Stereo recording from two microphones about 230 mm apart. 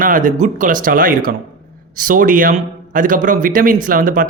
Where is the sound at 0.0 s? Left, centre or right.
Right.